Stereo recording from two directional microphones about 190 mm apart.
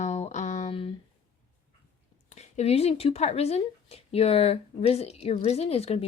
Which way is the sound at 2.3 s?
35° left (ahead or behind).